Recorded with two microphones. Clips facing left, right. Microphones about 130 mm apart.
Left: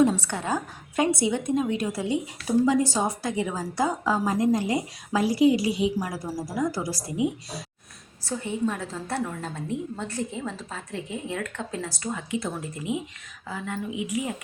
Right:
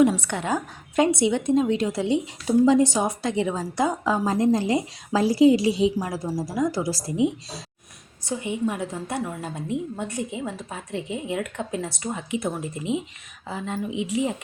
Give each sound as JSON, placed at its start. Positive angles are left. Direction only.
{"t": 0.2, "sound": "a woman's voice", "side_deg": -15}